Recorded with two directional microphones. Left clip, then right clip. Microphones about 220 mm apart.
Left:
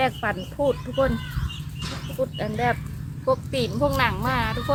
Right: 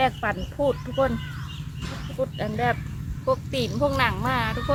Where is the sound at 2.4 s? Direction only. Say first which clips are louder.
Even; centre (ahead or behind).